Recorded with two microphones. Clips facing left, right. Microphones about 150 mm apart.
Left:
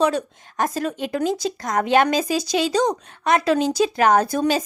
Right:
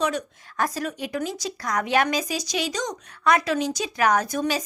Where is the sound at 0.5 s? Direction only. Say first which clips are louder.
Left 3 dB; 25° left (ahead or behind).